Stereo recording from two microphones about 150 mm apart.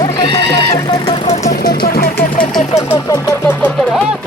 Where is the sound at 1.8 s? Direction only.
80° left.